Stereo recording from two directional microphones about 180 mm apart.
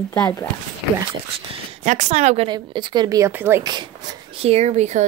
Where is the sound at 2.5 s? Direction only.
25° right (ahead or behind).